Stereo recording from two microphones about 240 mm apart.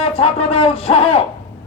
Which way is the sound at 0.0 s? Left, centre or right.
Left.